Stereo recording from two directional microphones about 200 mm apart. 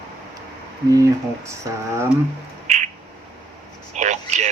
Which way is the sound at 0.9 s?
15° right (ahead or behind).